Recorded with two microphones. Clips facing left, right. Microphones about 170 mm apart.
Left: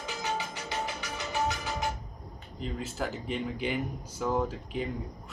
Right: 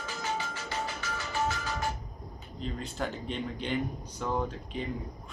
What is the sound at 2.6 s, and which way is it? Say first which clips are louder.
Speech: left 1 dB; 5° left (ahead or behind).